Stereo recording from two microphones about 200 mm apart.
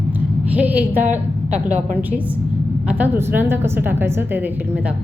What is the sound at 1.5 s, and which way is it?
A woman's voice, 5° right (ahead or behind).